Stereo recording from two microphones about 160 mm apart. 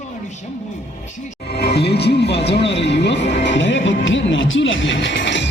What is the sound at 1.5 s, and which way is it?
Speech, 90° left.